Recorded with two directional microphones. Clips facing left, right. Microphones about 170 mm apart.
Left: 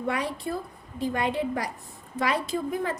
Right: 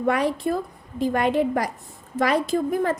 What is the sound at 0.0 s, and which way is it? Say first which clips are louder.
A woman's voice: right 7 dB; 50° right (ahead or behind).